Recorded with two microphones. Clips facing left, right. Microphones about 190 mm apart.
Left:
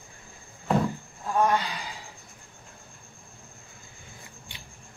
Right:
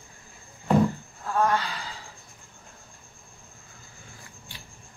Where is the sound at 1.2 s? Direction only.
15° left (ahead or behind).